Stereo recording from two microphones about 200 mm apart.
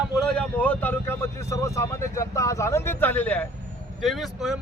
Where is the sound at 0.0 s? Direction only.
5° left (ahead or behind).